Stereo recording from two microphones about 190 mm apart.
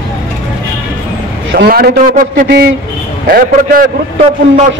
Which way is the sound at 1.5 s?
55° right (ahead or behind).